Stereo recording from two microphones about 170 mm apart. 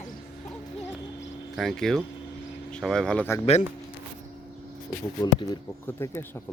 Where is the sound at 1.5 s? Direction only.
Centre (ahead or behind).